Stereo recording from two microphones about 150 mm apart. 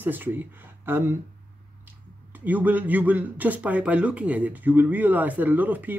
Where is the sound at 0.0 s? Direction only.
10° right (ahead or behind).